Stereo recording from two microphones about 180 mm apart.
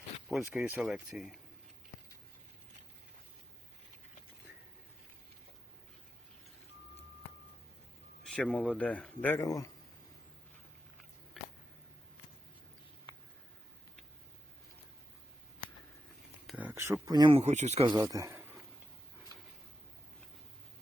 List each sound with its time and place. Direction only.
0.3 s speech: centre (ahead or behind)
8.2 s speech: 5° left (ahead or behind)
16.5 s speech: 10° right (ahead or behind); by 17.4 s 25° right (ahead or behind)
17.4 s speech: 40° right (ahead or behind)
17.9 s speech: 20° right (ahead or behind)